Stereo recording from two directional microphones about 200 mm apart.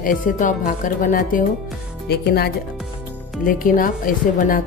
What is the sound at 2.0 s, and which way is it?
Music, 55° left (ahead or behind).